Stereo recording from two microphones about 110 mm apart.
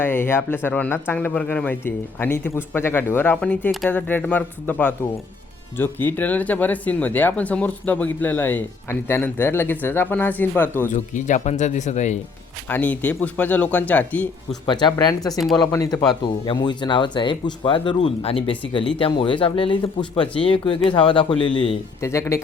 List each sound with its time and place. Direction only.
0.0 s speech: 20° left (ahead or behind)
10.9 s speech: 90° left
12.6 s speech: 15° left (ahead or behind)
14.7 s speech: 45° left (ahead or behind)
15.3 s speech: centre (ahead or behind)
15.7 s speech: 30° left (ahead or behind)
16.0 s speech: 45° left (ahead or behind)
22.0 s speech: 25° left (ahead or behind)